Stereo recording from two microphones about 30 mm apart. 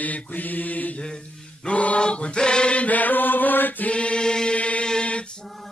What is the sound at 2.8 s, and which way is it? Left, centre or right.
Mantra, left.